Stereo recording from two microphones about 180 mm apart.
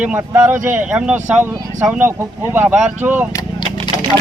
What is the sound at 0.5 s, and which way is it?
Speech, 45° right (ahead or behind).